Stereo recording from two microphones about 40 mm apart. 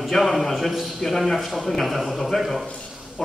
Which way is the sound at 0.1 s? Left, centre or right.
Centre.